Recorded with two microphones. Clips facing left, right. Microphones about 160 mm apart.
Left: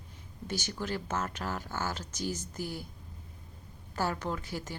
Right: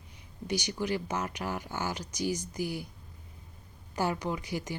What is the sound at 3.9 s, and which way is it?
Speech, 15° right (ahead or behind).